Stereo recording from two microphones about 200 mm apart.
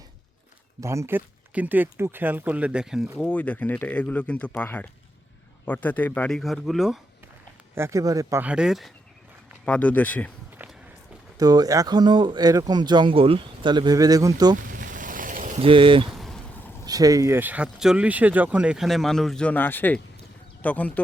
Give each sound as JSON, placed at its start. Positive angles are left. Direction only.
{"t": 0.8, "sound": "speech", "side_deg": -15}
{"t": 7.8, "sound": "speech", "side_deg": -15}
{"t": 10.5, "sound": "walk", "side_deg": -10}
{"t": 11.3, "sound": "speech", "side_deg": -20}
{"t": 14.5, "sound": "vehicle", "side_deg": -40}
{"t": 15.6, "sound": "speech", "side_deg": -25}
{"t": 16.0, "sound": "vehicle", "side_deg": 0}
{"t": 16.8, "sound": "speech", "side_deg": -20}